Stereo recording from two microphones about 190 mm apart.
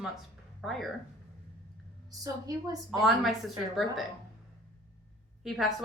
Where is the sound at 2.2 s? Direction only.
20° right (ahead or behind).